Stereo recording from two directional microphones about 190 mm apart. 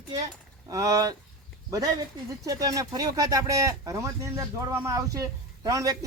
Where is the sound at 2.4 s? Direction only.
20° right (ahead or behind).